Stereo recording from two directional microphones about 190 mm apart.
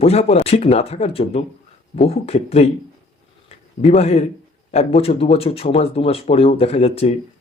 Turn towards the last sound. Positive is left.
turn(degrees=35)  # may be behind; listen again after turning